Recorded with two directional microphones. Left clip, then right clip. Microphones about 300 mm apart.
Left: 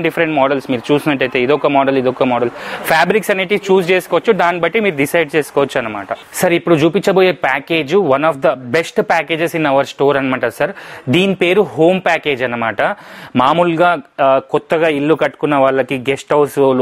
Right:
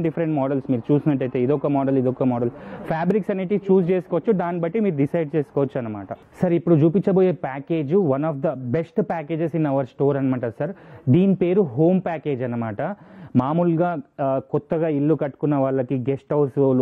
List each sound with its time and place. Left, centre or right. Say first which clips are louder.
0.0 s speech: left 10 dB; centre